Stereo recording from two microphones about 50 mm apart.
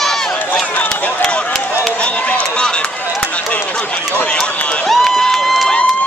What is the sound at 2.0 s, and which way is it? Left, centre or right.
Run, centre.